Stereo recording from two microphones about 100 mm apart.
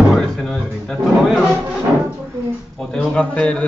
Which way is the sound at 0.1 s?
5° left (ahead or behind).